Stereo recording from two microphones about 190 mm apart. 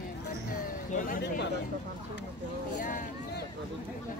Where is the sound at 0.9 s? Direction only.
45° left (ahead or behind).